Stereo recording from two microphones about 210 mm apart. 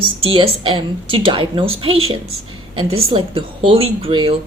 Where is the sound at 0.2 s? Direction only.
25° right (ahead or behind).